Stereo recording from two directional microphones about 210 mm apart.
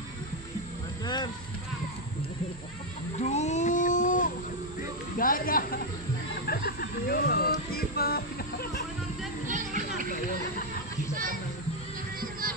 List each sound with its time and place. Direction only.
1.0 s vehicle: 20° left (ahead or behind)
3.2 s a sound: 35° left (ahead or behind)
5.2 s speech: 40° left (ahead or behind)
6.4 s music: 45° left (ahead or behind)
9.5 s a sound: 40° right (ahead or behind)
12.2 s music: 45° right (ahead or behind)